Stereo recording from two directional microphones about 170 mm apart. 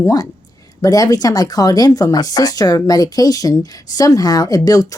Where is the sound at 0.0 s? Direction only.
20° left (ahead or behind).